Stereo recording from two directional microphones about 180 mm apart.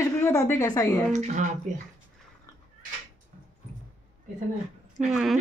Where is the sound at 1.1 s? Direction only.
40° right (ahead or behind).